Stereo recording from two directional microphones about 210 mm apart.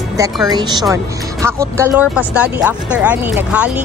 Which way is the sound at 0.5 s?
20° right (ahead or behind).